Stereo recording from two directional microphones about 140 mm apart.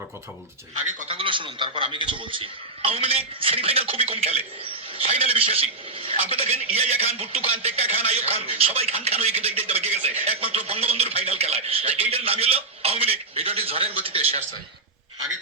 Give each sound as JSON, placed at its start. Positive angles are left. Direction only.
{"t": 0.7, "sound": "speech", "side_deg": -65}
{"t": 1.0, "sound": "speech", "side_deg": -40}